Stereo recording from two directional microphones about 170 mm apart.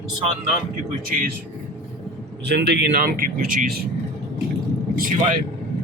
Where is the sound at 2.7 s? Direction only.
65° right (ahead or behind).